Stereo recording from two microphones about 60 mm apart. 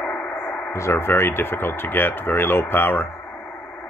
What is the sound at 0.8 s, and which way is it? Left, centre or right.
Speech, left.